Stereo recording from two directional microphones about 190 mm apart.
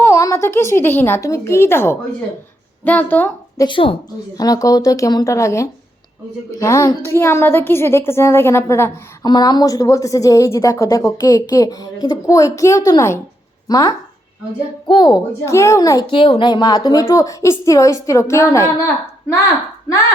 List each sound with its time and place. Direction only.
0.0 s a woman's voice: 15° left (ahead or behind)
3.6 s a woman's voice: 25° left (ahead or behind)